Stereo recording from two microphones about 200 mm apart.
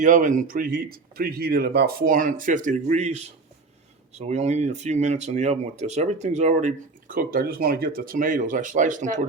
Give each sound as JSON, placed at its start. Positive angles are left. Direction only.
{"t": 0.0, "sound": "speech", "side_deg": -40}